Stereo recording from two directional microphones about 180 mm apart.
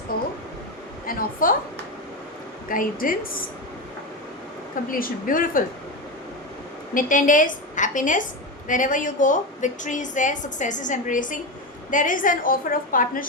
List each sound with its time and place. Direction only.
1.0 s a woman's voice: 50° left (ahead or behind)
2.6 s a woman's voice: 50° left (ahead or behind)
4.9 s a woman's voice: 50° left (ahead or behind)
6.9 s a woman's voice: 45° left (ahead or behind)